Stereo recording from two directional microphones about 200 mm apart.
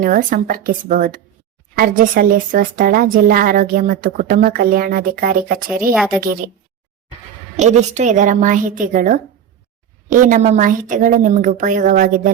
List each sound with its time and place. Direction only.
0.0 s a woman's voice: 45° right (ahead or behind)
7.5 s a woman's voice: 35° right (ahead or behind)